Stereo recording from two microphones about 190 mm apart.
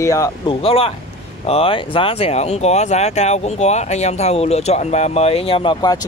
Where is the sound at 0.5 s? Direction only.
30° left (ahead or behind).